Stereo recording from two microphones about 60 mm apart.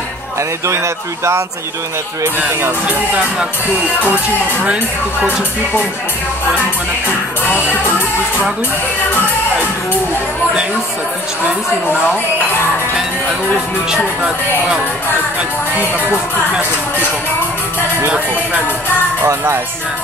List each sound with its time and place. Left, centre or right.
0.4 s speech: right
4.6 s speech: centre
18.1 s speech: right
19.2 s speech: right